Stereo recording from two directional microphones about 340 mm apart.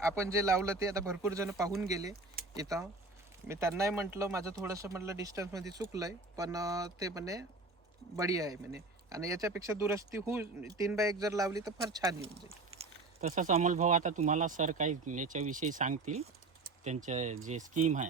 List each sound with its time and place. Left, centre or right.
0.2 s speech: centre